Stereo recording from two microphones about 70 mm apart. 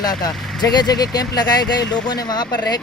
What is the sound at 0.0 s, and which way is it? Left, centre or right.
Speech, left.